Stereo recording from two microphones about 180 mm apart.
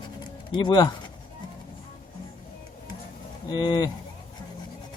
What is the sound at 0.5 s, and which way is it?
Speech, 25° left (ahead or behind).